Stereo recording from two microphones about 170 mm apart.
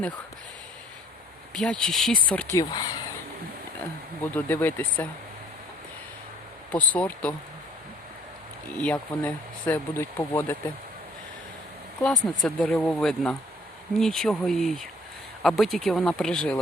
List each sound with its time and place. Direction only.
1.5 s speech: 5° left (ahead or behind)
2.6 s speech: 20° left (ahead or behind)
4.2 s speech: 10° left (ahead or behind)
6.7 s speech: 10° left (ahead or behind)
8.8 s speech: 10° left (ahead or behind)
12.2 s speech: 5° left (ahead or behind)